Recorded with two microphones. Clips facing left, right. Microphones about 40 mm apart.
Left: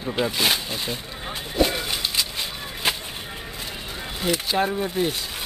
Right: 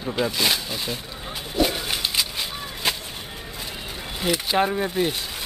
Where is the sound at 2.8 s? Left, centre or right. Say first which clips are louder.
Left 1 dB; centre.